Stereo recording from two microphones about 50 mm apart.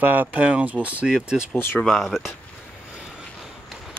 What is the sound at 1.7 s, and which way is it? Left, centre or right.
Speech, centre.